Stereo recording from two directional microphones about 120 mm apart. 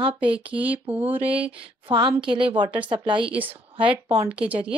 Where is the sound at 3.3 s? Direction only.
10° right (ahead or behind).